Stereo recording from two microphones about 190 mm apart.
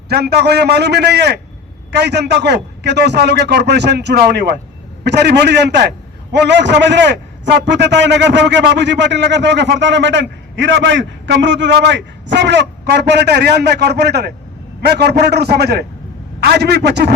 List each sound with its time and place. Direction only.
0.1 s a man's voice: 60° right (ahead or behind)